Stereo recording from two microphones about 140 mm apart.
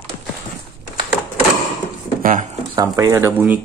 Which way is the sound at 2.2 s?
65° right (ahead or behind).